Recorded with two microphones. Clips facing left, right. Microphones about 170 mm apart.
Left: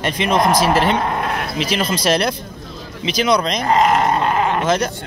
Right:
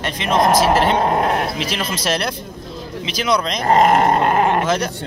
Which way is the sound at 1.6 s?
Centre (ahead or behind).